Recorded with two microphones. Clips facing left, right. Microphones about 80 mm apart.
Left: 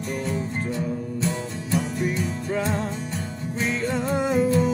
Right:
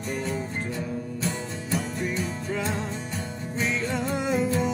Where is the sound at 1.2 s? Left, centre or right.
Centre.